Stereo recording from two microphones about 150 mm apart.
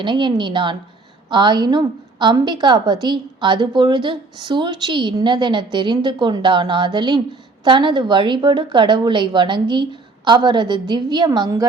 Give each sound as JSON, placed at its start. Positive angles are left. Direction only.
{"t": 0.0, "sound": "a woman's voice", "side_deg": -30}